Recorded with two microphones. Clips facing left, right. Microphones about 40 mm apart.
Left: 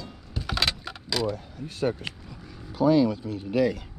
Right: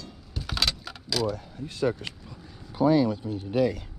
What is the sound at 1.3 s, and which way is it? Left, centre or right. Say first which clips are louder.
Speech: even; right.